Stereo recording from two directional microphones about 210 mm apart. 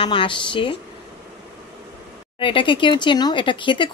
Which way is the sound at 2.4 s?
25° left (ahead or behind).